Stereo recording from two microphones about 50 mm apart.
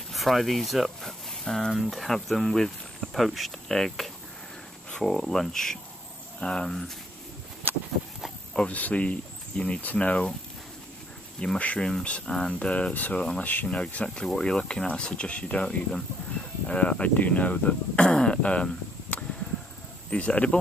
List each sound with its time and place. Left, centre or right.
0.1 s speech: centre
1.4 s speech: centre
1.7 s speech: centre
8.7 s speech: left
11.5 s speech: left